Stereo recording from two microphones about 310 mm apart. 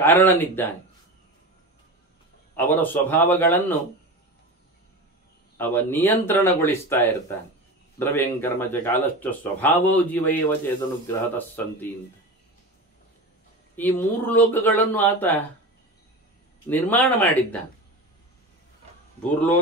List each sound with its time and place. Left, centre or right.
0.0 s speech: centre
2.5 s a man's voice: centre
5.6 s speech: centre
13.7 s speech: centre
16.6 s a man's voice: centre